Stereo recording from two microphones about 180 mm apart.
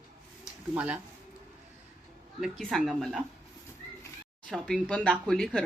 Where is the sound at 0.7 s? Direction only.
5° right (ahead or behind).